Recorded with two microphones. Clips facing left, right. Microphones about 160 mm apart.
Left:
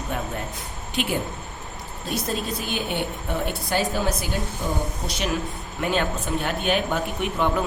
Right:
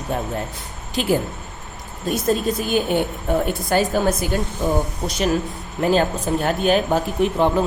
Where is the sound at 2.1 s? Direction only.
50° right (ahead or behind).